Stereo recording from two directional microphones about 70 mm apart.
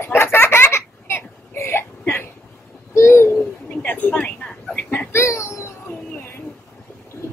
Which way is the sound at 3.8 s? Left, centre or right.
Left.